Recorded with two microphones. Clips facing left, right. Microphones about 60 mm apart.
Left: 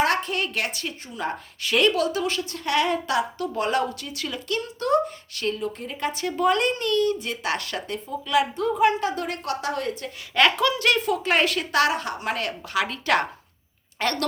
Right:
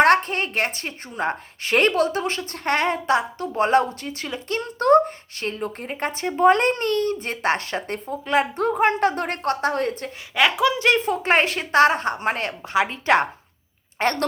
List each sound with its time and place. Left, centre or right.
0.0 s a woman's voice: right
7.9 s speech: right
10.3 s a woman's voice: centre; by 14.3 s right